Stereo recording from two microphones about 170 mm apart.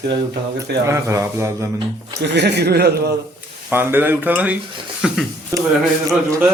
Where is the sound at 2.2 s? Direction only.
80° right.